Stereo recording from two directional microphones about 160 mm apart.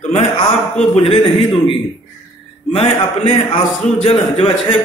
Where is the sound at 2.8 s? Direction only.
40° left (ahead or behind).